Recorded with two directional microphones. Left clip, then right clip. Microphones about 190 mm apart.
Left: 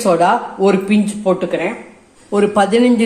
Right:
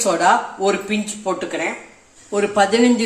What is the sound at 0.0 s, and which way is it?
Speech, 20° left (ahead or behind).